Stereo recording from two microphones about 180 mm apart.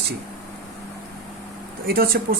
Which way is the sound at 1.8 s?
55° right (ahead or behind).